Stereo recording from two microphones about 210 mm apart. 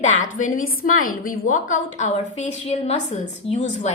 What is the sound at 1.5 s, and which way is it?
Speech, 70° left (ahead or behind).